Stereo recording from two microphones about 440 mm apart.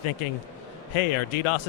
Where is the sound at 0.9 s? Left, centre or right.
Left.